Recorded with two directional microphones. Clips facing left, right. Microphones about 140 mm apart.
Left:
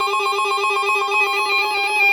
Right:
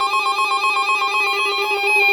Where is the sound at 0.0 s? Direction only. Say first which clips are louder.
Even; centre (ahead or behind).